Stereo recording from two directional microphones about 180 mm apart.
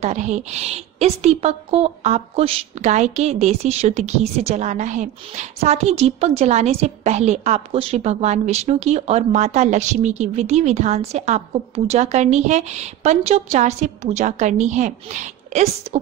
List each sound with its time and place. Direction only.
0.0 s a woman's voice: 40° right (ahead or behind)